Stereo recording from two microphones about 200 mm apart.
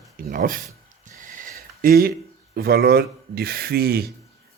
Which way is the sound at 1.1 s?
40° right (ahead or behind).